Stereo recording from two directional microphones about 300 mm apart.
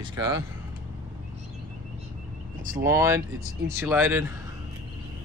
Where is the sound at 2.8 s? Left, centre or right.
Centre.